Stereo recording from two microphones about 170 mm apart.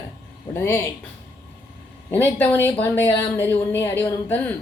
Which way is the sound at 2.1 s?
10° left (ahead or behind).